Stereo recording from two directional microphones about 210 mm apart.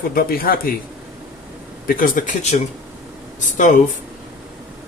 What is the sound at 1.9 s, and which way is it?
Speech, 40° left (ahead or behind).